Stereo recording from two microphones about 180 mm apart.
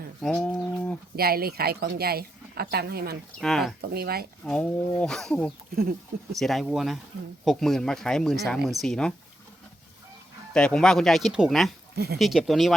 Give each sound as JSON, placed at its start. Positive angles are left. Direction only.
{"t": 0.2, "sound": "speech", "side_deg": 5}
{"t": 1.1, "sound": "speech", "side_deg": -60}
{"t": 3.4, "sound": "speech", "side_deg": 0}
{"t": 3.8, "sound": "speech", "side_deg": -60}
{"t": 4.4, "sound": "speech", "side_deg": 5}
{"t": 10.5, "sound": "speech", "side_deg": 5}
{"t": 11.9, "sound": "speech", "side_deg": -60}
{"t": 12.2, "sound": "speech", "side_deg": 0}